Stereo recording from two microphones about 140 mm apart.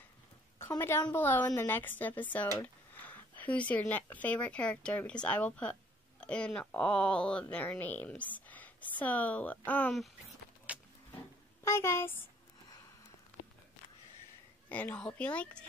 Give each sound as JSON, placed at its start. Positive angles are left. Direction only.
{"t": 0.6, "sound": "a woman's voice", "side_deg": 20}
{"t": 10.7, "sound": "a sound", "side_deg": -10}
{"t": 11.6, "sound": "speech", "side_deg": 20}
{"t": 14.7, "sound": "speech", "side_deg": 10}